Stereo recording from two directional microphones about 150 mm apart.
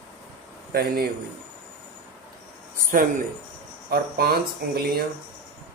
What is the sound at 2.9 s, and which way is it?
Speech, 65° right (ahead or behind).